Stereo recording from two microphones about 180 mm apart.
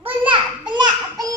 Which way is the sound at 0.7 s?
25° right (ahead or behind).